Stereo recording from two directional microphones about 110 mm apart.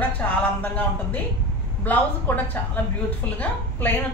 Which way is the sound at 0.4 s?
15° left (ahead or behind).